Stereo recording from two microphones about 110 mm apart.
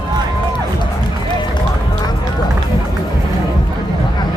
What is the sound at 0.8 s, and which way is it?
Run, 45° left (ahead or behind).